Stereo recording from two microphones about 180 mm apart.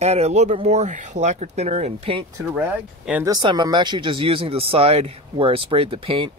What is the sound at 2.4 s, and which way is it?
Speech, 10° right (ahead or behind).